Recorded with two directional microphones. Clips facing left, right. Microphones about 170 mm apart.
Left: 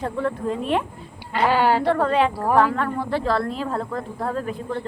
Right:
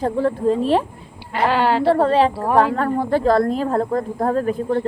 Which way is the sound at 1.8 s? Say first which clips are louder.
Right 4 dB; 30° right (ahead or behind).